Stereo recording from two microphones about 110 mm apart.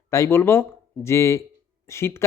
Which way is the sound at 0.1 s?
25° left (ahead or behind).